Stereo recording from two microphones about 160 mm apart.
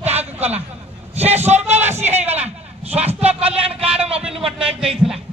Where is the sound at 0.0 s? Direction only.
40° right (ahead or behind).